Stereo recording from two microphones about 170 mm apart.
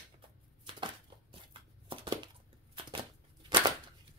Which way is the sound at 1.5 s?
30° right (ahead or behind).